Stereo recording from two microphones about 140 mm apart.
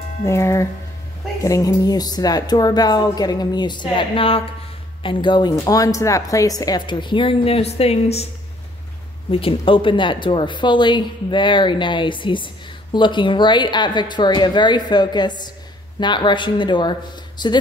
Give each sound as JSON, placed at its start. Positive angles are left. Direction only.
{"t": 0.2, "sound": "speech", "side_deg": 20}
{"t": 9.3, "sound": "speech", "side_deg": 40}